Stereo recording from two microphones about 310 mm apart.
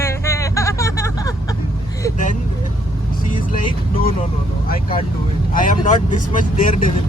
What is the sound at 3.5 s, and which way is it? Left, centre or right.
Speech, left.